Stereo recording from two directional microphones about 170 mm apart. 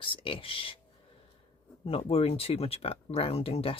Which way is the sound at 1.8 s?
35° left (ahead or behind).